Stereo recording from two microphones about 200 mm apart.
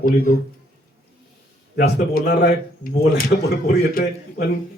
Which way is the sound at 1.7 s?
50° left (ahead or behind).